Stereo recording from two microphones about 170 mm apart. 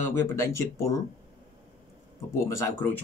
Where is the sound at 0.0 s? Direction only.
15° left (ahead or behind).